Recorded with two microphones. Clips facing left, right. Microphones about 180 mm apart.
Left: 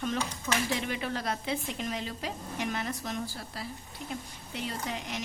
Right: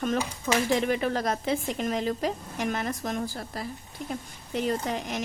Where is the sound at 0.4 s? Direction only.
50° right (ahead or behind).